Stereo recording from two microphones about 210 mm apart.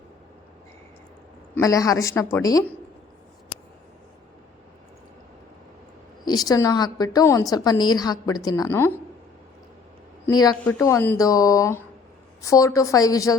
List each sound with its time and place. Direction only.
1.5 s a woman's voice: 15° left (ahead or behind)
6.2 s a woman's voice: 20° left (ahead or behind)
10.2 s a woman's voice: 20° left (ahead or behind)